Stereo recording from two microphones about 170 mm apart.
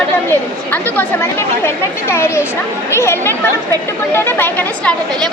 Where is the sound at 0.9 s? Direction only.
15° left (ahead or behind).